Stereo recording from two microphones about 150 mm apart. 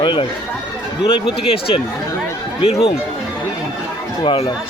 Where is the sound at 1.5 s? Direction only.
40° left (ahead or behind).